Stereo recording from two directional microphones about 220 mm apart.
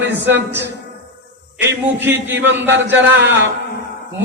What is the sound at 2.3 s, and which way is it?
Speech, 55° right (ahead or behind).